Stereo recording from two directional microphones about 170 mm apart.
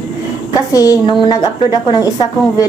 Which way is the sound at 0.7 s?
20° left (ahead or behind).